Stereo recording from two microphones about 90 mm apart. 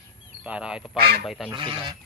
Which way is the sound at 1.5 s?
65° right (ahead or behind).